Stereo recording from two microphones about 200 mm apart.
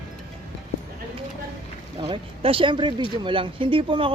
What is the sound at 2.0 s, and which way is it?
Speech, 25° right (ahead or behind).